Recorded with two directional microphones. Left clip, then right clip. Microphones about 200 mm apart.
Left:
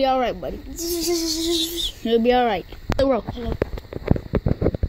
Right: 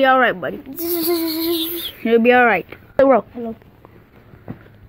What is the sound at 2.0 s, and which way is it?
Speech, 15° left (ahead or behind).